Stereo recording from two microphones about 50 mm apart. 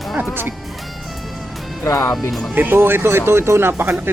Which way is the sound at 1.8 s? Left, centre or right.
Left.